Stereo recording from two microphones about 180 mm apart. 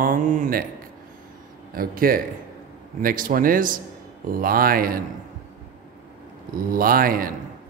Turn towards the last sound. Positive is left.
turn(degrees=-55)  # may be behind; listen again after turning